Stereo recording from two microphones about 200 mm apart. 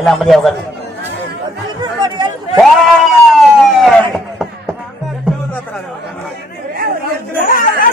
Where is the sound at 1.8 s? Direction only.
20° right (ahead or behind).